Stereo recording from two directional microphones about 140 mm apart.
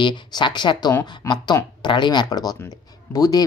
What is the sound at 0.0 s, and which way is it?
Speech, 35° left (ahead or behind).